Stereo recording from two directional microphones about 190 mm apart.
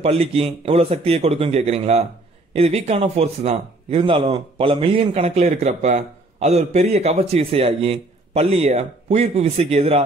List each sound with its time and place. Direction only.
0.0 s a man's voice: 30° right (ahead or behind)